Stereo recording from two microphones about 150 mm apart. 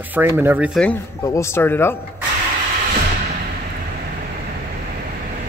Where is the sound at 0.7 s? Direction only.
5° left (ahead or behind).